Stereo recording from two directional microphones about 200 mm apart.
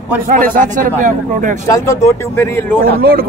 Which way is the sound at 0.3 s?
45° right (ahead or behind).